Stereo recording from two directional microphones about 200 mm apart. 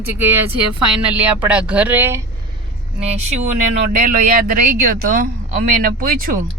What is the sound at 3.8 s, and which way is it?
Speech, 45° right (ahead or behind).